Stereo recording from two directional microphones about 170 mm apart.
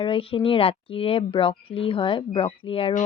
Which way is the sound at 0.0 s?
30° left (ahead or behind).